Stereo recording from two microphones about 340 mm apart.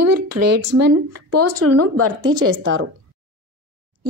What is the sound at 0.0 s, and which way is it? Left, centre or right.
A woman's voice, right.